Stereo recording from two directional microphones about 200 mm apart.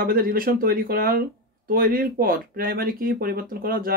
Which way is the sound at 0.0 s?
45° right (ahead or behind).